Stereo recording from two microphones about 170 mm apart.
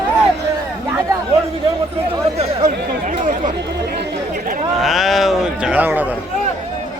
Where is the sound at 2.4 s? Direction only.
50° right (ahead or behind).